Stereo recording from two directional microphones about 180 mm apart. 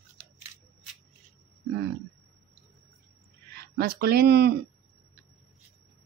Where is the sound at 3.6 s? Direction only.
60° right (ahead or behind).